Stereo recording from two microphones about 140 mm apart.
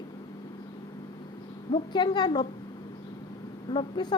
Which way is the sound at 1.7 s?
30° left (ahead or behind).